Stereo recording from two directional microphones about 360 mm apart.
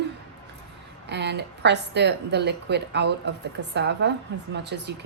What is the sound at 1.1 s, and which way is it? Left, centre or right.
A woman's voice, right.